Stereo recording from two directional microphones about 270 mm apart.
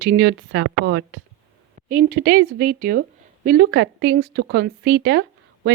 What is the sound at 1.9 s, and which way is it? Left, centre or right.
A woman's voice, right.